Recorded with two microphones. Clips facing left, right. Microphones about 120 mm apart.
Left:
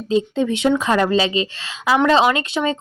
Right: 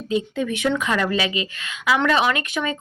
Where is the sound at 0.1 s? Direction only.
30° left (ahead or behind).